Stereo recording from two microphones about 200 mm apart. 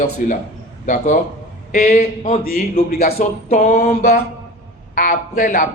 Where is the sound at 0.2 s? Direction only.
40° left (ahead or behind).